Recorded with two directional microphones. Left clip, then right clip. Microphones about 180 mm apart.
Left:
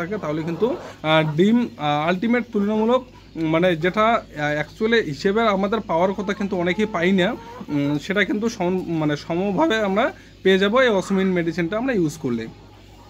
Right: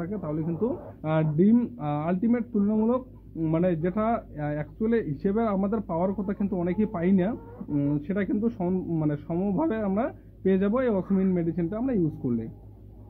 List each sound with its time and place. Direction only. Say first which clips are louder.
0.0 s speech: left 7 dB; 15° left (ahead or behind)